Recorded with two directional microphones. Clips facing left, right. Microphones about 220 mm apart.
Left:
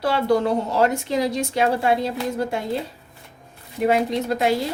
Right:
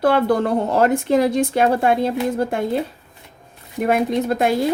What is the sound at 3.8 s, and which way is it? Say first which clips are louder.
Speech: right 2 dB; 50° right (ahead or behind).